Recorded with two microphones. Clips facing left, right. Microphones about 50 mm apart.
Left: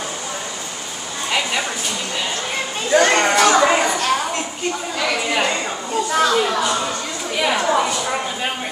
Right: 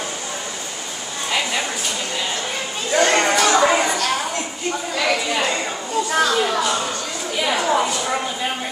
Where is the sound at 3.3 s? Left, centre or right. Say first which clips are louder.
Left 2 dB; left.